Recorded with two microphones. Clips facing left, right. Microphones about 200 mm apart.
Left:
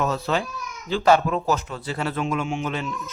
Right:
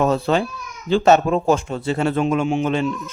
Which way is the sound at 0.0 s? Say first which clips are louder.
Right 6 dB; 30° right (ahead or behind).